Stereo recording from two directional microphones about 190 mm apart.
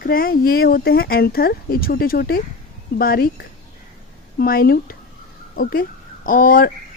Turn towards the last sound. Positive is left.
turn(degrees=50)  # may be behind; listen again after turning